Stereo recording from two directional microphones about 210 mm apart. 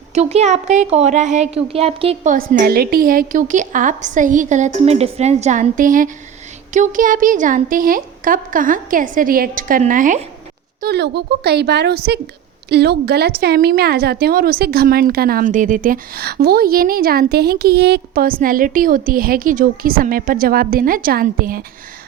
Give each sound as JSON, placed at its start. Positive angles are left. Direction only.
{"t": 0.1, "sound": "a woman's voice", "side_deg": -30}
{"t": 10.8, "sound": "a woman's voice", "side_deg": -50}